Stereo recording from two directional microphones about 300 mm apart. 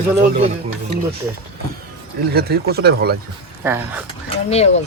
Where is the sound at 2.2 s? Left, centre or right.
Right.